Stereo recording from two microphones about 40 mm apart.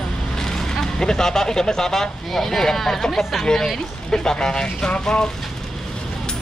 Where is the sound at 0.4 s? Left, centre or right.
Centre.